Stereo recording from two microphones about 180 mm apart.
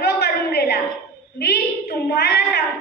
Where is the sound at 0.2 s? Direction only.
60° left (ahead or behind).